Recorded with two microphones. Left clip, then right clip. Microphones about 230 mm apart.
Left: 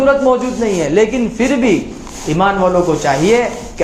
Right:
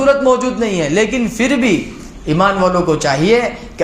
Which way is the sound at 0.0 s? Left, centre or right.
Right.